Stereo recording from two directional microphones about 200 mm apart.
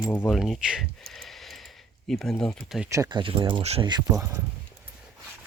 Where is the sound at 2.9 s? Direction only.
20° right (ahead or behind).